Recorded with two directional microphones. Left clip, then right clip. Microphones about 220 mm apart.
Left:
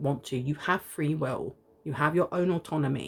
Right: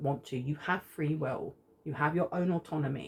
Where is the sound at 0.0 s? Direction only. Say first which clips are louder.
Left 3 dB; 40° left (ahead or behind).